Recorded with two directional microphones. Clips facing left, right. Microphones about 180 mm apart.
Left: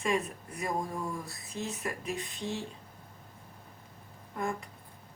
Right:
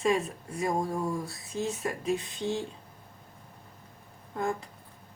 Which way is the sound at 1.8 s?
25° right (ahead or behind).